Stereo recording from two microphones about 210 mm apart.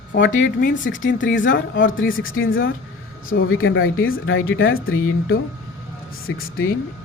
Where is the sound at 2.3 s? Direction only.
45° left (ahead or behind).